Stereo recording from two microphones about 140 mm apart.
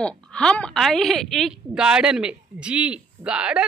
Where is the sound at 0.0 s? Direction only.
5° left (ahead or behind).